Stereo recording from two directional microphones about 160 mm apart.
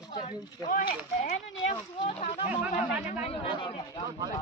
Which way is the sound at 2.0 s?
40° left (ahead or behind).